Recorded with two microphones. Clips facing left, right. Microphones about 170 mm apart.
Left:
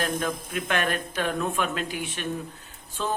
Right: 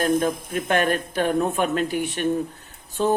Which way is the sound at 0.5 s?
40° right (ahead or behind).